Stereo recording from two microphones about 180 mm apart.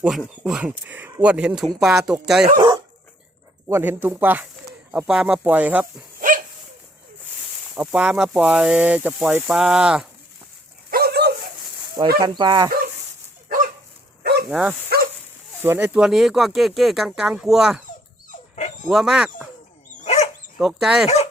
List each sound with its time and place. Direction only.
0.2 s speech: 5° right (ahead or behind)
2.6 s dog: 25° right (ahead or behind)
3.7 s speech: 10° right (ahead or behind)
6.1 s dog: 50° right (ahead or behind)
7.8 s speech: 5° right (ahead or behind)
10.9 s dog: 60° right (ahead or behind)
12.2 s speech: 25° right (ahead or behind)
14.5 s speech: 5° right (ahead or behind)
14.8 s livestock: 55° right (ahead or behind)
15.6 s speech: 15° right (ahead or behind)
18.3 s dog: 40° left (ahead or behind)
18.9 s speech: centre (ahead or behind)
20.0 s dog: 40° left (ahead or behind)
20.6 s speech: centre (ahead or behind)